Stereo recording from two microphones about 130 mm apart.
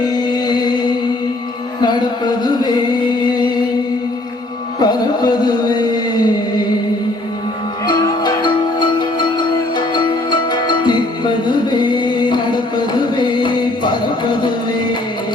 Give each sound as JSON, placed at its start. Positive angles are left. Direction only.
{"t": 0.1, "sound": "music", "side_deg": 30}
{"t": 4.8, "sound": "music", "side_deg": 30}
{"t": 7.9, "sound": "music", "side_deg": 30}